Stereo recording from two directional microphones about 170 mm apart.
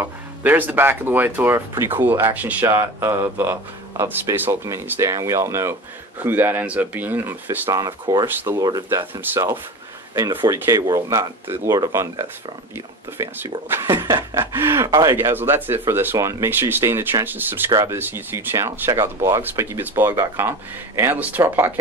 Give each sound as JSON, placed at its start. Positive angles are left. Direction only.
{"t": 0.4, "sound": "speech", "side_deg": -10}
{"t": 8.3, "sound": "speech", "side_deg": -10}
{"t": 10.1, "sound": "speech", "side_deg": -20}